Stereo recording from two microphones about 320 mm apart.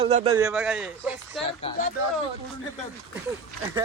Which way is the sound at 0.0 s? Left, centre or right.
Centre.